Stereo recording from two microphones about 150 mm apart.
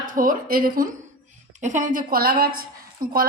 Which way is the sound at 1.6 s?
55° right (ahead or behind).